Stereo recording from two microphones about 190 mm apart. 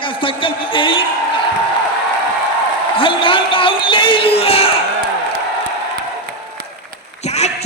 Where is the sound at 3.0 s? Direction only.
25° left (ahead or behind).